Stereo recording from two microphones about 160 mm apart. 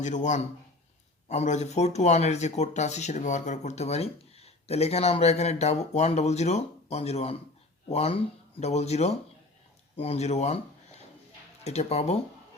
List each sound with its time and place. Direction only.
0.0 s speech: 50° left (ahead or behind)
11.6 s speech: 45° left (ahead or behind)